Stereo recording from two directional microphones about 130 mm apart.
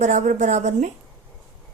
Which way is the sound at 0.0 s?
65° right (ahead or behind).